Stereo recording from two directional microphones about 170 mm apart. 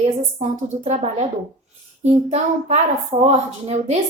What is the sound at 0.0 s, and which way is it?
A child's voice, 40° right (ahead or behind).